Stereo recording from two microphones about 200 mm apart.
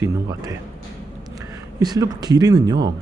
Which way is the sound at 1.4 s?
20° right (ahead or behind).